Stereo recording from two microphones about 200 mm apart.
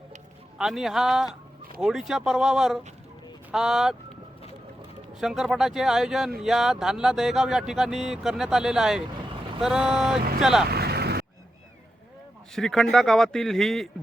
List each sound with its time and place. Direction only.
0.6 s speech: centre (ahead or behind)
5.2 s speech: centre (ahead or behind)
10.7 s vehicle: 50° right (ahead or behind)
12.5 s speech: centre (ahead or behind)